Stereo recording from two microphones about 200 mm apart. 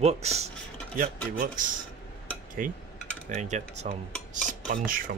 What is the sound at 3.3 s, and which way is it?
Speech, 35° right (ahead or behind).